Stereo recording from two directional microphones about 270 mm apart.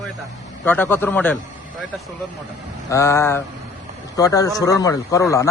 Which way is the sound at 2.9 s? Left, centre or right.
Centre.